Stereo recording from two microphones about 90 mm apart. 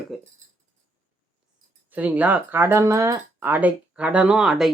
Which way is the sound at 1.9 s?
15° right (ahead or behind).